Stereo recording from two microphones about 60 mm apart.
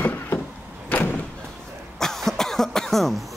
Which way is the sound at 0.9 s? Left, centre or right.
Left.